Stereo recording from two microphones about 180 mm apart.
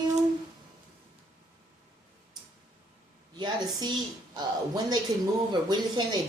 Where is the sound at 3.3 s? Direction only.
25° right (ahead or behind).